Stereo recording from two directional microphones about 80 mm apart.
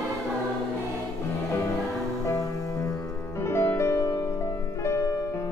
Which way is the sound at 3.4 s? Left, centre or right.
Left.